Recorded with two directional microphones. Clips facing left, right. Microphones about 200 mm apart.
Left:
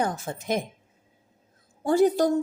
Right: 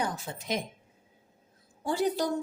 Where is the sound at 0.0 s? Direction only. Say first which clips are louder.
Left 5 dB; 50° left (ahead or behind).